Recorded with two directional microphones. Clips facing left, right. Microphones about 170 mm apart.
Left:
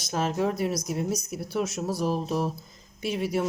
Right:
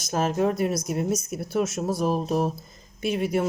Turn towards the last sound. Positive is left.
turn(degrees=-55)  # may be behind; listen again after turning